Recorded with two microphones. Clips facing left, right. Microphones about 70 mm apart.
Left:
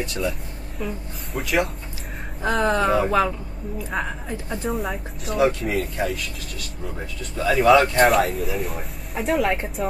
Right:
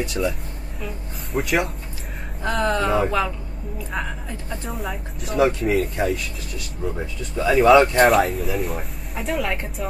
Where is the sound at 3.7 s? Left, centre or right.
Centre.